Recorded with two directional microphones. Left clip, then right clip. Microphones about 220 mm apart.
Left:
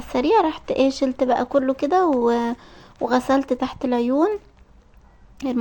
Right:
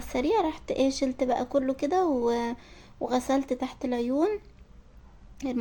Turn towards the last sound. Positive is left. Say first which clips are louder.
# left 7 dB
turn(degrees=15)  # may be behind; listen again after turning